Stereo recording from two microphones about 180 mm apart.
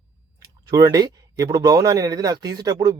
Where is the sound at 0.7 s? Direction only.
20° right (ahead or behind).